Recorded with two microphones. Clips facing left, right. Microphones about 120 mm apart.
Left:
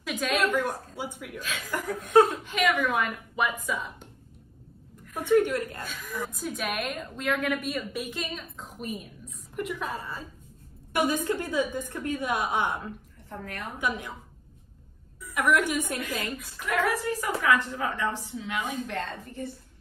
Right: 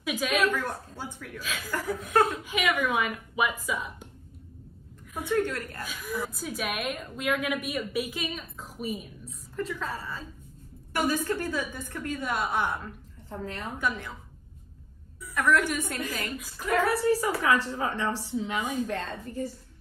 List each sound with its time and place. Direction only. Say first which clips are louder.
0.0 s a woman's voice: even; 5° right (ahead or behind)
0.5 s a woman's voice: left 2 dB; 15° left (ahead or behind)
1.4 s a woman's voice: even; centre (ahead or behind)
5.3 s a woman's voice: left 5 dB; 15° left (ahead or behind)
5.9 s a woman's voice: right 2 dB; 10° right (ahead or behind)
9.6 s a woman's voice: left 1 dB; 15° left (ahead or behind)
13.3 s a woman's voice: right 2 dB; 25° right (ahead or behind)
13.7 s a woman's voice: left 1 dB; 15° left (ahead or behind)
15.3 s a woman's voice: even; 15° left (ahead or behind)
16.5 s a woman's voice: right 2 dB; 35° right (ahead or behind)
18.6 s a woman's voice: left 1 dB; 15° right (ahead or behind)
18.9 s a woman's voice: right 1 dB; 40° right (ahead or behind)